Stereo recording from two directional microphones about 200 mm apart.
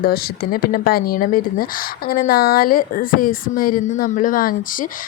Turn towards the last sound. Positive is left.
turn(degrees=45)  # may be behind; listen again after turning